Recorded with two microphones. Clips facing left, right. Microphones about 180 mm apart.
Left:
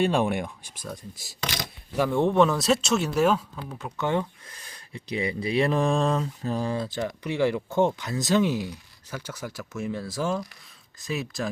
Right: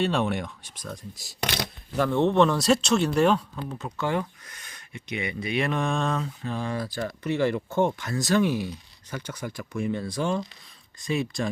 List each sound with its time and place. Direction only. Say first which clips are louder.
0.0 s speech: left 2 dB; 10° left (ahead or behind)
4.0 s speech: left 1 dB; 20° left (ahead or behind); by 6.7 s 40° left (ahead or behind)
6.7 s speech: left 1 dB; 20° left (ahead or behind); by 11.4 s 5° left (ahead or behind)